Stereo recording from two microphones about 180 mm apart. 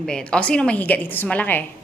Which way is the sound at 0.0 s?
5° left (ahead or behind).